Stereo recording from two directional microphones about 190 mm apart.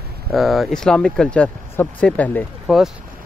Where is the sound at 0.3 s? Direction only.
Centre (ahead or behind).